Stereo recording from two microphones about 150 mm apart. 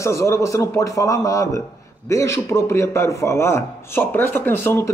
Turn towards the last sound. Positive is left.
turn(degrees=15)  # may be behind; listen again after turning